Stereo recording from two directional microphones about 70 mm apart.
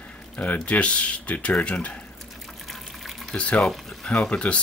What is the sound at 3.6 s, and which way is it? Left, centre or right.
Speech, centre.